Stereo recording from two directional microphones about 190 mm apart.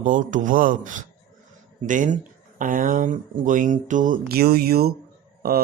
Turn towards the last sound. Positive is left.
turn(degrees=-55)  # may be behind; listen again after turning